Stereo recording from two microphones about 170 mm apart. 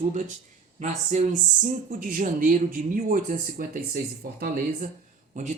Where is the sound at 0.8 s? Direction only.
45° right (ahead or behind).